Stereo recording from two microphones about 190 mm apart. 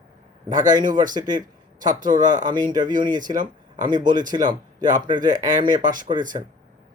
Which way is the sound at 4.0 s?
45° right (ahead or behind).